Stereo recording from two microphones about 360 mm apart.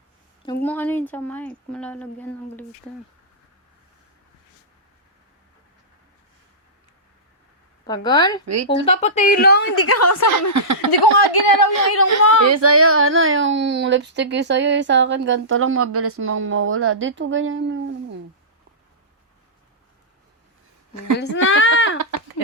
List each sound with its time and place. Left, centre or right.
0.4 s speech: centre
7.9 s a woman's voice: centre
8.4 s speech: right
8.8 s a woman's voice: centre
9.8 s a woman's voice: left
10.5 s speech: right
11.0 s a woman's voice: left
11.6 s speech: left
12.1 s speech: right
21.2 s speech: left